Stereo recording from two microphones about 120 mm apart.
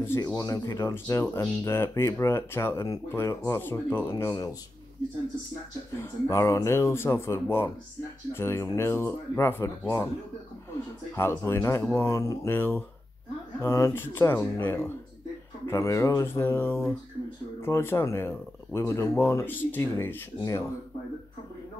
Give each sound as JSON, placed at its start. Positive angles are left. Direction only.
{"t": 0.0, "sound": "speech", "side_deg": 20}
{"t": 5.9, "sound": "speech", "side_deg": 25}
{"t": 11.1, "sound": "speech", "side_deg": 20}